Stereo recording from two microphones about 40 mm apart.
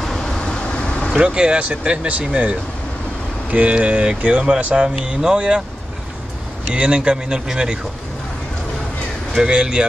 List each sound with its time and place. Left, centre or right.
0.0 s vehicle: centre
0.4 s vehicle: left
1.2 s speech: right
4.6 s speech: right
4.8 s speech: right
6.7 s speech: right
9.4 s speech: centre